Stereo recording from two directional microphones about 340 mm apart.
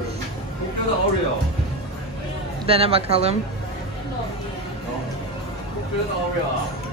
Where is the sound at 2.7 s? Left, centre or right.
Centre.